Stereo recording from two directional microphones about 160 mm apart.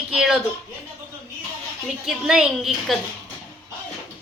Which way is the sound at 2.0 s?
5° right (ahead or behind).